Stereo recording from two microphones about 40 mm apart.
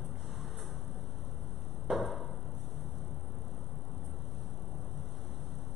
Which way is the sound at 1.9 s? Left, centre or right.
Centre.